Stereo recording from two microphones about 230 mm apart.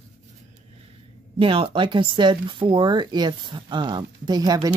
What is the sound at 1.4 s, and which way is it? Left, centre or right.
Speech, right.